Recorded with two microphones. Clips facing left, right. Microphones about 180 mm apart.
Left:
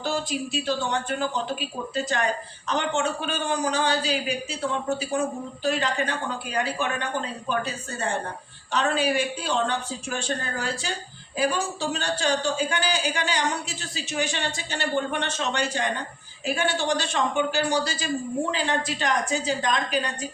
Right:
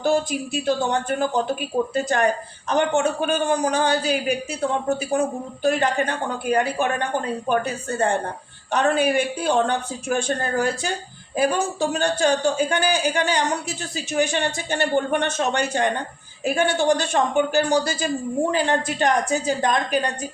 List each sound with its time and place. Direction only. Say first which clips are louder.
0.0 s a woman's voice: right 6 dB; 50° right (ahead or behind)
5.6 s a woman's voice: right 5 dB; 50° right (ahead or behind)